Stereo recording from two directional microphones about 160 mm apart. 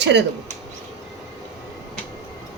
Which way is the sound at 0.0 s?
90° right.